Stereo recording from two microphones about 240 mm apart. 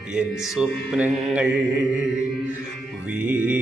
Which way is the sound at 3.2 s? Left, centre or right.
Centre.